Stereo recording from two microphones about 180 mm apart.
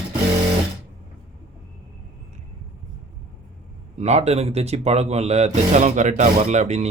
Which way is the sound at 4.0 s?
35° right (ahead or behind).